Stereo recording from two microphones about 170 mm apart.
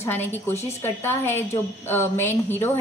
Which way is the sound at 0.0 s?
10° left (ahead or behind).